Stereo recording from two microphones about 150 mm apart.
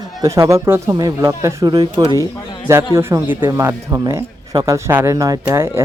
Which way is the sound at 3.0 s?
15° right (ahead or behind).